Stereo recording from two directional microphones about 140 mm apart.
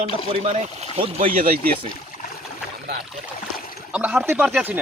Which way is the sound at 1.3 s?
90° right.